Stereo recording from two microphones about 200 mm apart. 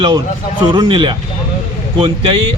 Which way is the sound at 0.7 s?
25° right (ahead or behind).